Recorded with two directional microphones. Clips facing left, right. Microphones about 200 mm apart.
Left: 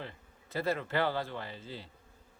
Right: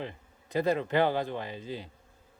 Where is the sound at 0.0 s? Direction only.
15° right (ahead or behind).